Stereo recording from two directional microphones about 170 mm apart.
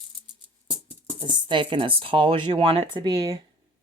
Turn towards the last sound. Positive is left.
turn(degrees=-25)  # may be behind; listen again after turning